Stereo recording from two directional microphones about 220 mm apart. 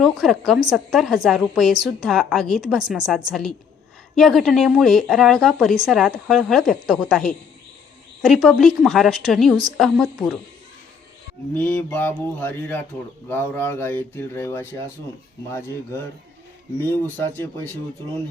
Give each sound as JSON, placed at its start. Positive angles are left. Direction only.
{"t": 0.0, "sound": "speech", "side_deg": 0}
{"t": 4.1, "sound": "speech", "side_deg": 0}
{"t": 11.5, "sound": "speech", "side_deg": 5}